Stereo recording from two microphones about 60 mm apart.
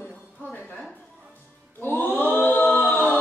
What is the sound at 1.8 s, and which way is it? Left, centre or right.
A capella, left.